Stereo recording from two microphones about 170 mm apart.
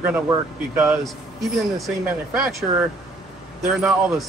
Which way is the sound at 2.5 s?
Centre (ahead or behind).